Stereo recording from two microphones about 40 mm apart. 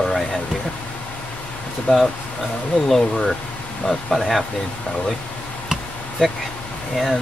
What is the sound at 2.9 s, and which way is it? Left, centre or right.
Speech, centre.